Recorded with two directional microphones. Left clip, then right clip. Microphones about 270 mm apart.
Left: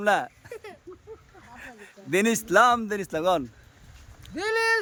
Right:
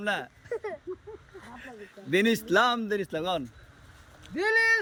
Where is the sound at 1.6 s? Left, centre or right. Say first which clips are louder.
Left 4 dB; centre.